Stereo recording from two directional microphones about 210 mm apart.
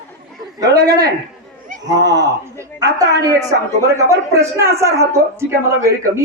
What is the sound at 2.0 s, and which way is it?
Speech, 55° right (ahead or behind).